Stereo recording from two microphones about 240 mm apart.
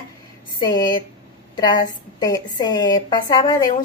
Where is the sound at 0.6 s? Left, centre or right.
Centre.